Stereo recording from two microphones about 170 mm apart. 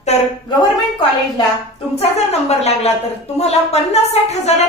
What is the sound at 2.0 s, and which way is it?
A woman's voice, 40° left (ahead or behind).